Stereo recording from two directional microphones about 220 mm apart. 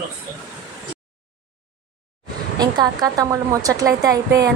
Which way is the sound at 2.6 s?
15° right (ahead or behind).